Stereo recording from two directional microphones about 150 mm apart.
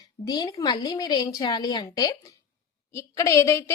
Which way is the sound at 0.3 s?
25° left (ahead or behind).